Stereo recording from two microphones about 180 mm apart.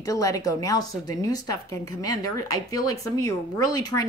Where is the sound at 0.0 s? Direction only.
20° left (ahead or behind).